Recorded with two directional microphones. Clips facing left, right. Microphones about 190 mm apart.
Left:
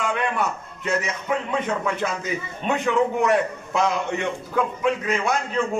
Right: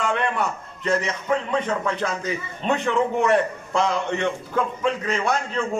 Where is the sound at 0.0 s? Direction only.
5° left (ahead or behind).